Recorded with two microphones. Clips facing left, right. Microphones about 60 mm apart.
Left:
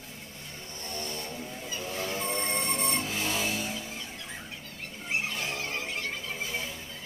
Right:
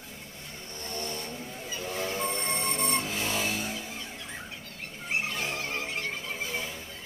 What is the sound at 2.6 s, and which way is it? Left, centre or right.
Music, right.